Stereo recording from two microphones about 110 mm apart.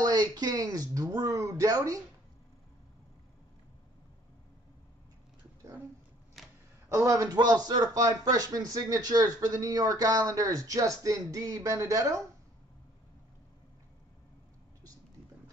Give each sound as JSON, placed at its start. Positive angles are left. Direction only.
{"t": 0.0, "sound": "speech", "side_deg": -35}
{"t": 6.4, "sound": "a sound", "side_deg": 0}
{"t": 6.9, "sound": "speech", "side_deg": -25}
{"t": 7.3, "sound": "speech", "side_deg": -40}